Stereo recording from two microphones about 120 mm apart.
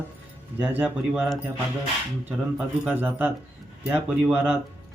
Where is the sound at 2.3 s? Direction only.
15° right (ahead or behind).